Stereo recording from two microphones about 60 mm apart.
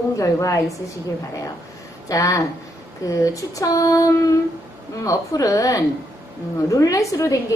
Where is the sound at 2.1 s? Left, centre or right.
Left.